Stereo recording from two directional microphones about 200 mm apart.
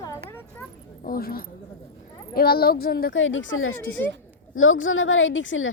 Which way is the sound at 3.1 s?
75° left (ahead or behind).